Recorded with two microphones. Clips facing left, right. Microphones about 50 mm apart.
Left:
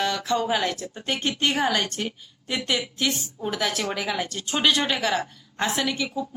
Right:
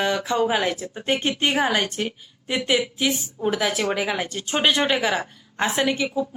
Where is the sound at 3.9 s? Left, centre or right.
Centre.